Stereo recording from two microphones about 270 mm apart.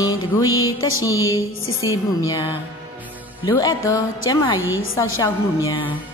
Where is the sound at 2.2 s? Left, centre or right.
Centre.